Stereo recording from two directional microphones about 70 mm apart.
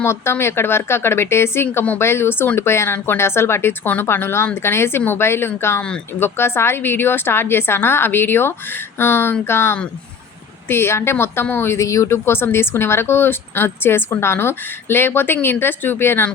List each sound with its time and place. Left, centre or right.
0.0 s speech: left
11.8 s speech: left